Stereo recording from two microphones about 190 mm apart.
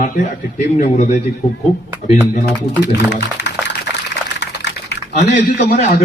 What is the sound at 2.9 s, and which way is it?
Speech, 65° left (ahead or behind).